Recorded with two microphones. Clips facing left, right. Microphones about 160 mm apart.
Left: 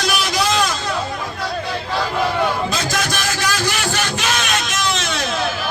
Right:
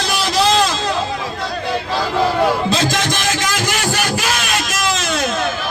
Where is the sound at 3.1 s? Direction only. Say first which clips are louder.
Right 2 dB; 20° right (ahead or behind).